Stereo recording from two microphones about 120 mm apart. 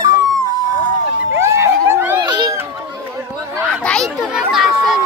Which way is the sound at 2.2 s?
40° right (ahead or behind).